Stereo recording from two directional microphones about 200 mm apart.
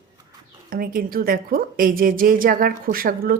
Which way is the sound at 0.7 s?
45° right (ahead or behind).